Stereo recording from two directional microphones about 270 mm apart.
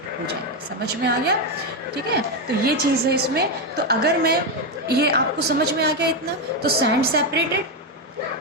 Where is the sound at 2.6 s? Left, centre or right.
Right.